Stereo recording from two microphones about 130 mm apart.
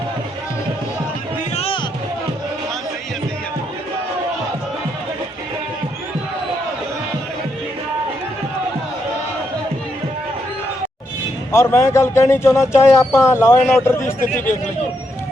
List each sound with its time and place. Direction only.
1.5 s music: 50° left (ahead or behind)
11.5 s speech: 20° left (ahead or behind)